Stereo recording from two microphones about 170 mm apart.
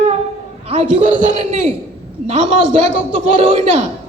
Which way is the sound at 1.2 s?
45° right (ahead or behind).